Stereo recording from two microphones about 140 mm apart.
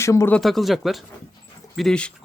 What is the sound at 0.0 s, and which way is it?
Speech, 20° left (ahead or behind).